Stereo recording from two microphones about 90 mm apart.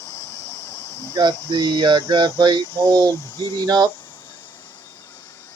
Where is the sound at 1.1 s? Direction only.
55° right (ahead or behind).